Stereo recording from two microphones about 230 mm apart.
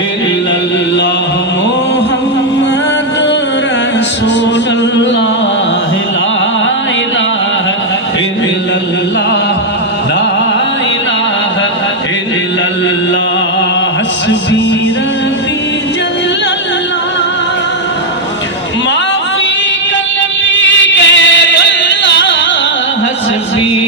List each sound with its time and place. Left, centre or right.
20.4 s music: left